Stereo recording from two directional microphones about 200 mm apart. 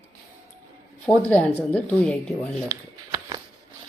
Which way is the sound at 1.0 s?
5° left (ahead or behind).